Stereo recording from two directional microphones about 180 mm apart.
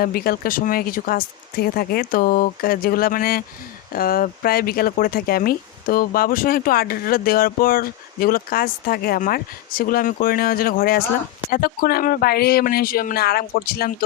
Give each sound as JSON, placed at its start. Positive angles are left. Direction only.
{"t": 0.0, "sound": "speech", "side_deg": 55}